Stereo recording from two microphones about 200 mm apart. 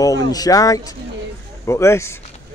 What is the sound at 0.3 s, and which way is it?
Speech, 20° left (ahead or behind).